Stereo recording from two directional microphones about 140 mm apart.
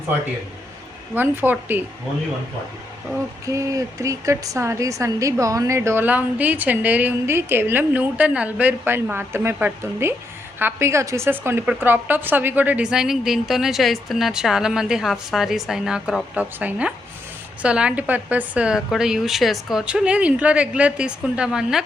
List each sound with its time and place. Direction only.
1.1 s a woman's voice: 15° right (ahead or behind)
3.4 s a woman's voice: 25° right (ahead or behind); by 21.8 s 5° right (ahead or behind)